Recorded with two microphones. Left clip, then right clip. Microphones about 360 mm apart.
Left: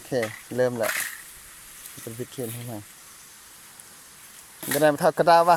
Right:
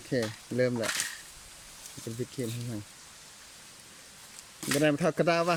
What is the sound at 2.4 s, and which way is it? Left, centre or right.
Speech, left.